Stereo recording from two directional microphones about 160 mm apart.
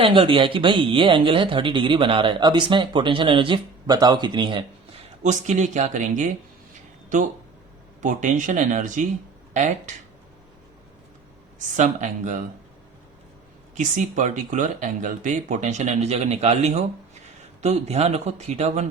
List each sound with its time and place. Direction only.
0.0 s speech: 35° right (ahead or behind)
5.2 s speech: 45° right (ahead or behind)
11.8 s speech: 50° right (ahead or behind)
13.7 s speech: 50° right (ahead or behind)